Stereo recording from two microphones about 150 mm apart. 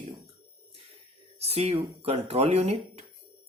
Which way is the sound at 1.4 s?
45° right (ahead or behind).